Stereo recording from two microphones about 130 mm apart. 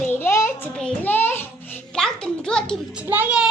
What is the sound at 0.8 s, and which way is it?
A child's voice, 10° left (ahead or behind).